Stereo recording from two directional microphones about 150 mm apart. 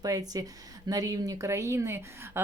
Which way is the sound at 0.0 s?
25° right (ahead or behind).